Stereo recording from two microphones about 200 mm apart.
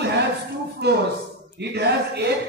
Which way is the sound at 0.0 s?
55° right (ahead or behind).